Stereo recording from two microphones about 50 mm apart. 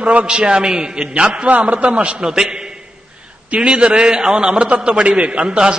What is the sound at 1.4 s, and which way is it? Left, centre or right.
A man's voice, right.